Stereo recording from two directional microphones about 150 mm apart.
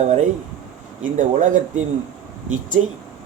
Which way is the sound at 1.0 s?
55° right (ahead or behind).